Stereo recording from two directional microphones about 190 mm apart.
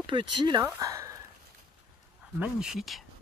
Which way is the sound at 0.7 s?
15° right (ahead or behind).